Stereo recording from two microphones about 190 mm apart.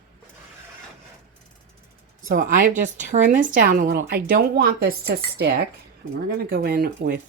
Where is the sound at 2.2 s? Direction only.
45° right (ahead or behind).